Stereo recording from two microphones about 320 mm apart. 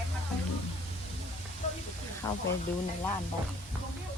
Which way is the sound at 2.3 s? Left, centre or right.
Centre.